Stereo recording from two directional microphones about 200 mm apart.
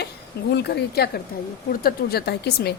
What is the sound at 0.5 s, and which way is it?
A woman's voice, 55° left (ahead or behind).